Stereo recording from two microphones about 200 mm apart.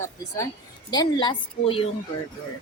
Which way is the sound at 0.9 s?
20° left (ahead or behind).